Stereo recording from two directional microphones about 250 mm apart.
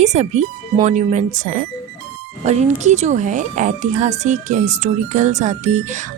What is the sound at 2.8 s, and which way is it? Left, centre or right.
Speech, right.